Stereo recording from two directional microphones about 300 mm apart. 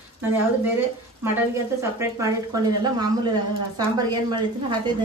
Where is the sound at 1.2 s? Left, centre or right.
Centre.